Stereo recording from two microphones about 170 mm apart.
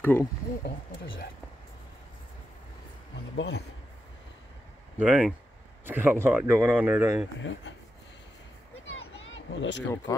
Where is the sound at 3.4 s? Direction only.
80° left.